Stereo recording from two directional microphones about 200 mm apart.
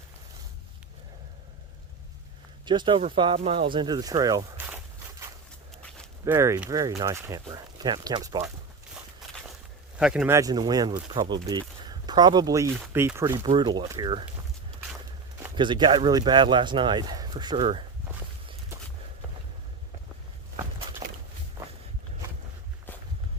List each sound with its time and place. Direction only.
2.6 s speech: 25° right (ahead or behind)
6.2 s speech: 15° right (ahead or behind)
10.0 s speech: 5° right (ahead or behind); by 14.3 s 20° right (ahead or behind)
15.5 s speech: 25° right (ahead or behind)